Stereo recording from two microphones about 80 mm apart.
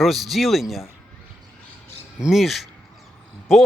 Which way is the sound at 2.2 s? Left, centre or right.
Centre.